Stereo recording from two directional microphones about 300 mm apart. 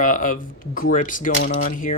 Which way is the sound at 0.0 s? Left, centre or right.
Left.